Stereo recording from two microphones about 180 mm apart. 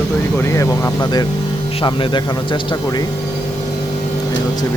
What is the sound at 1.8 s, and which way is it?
Speech, 25° left (ahead or behind).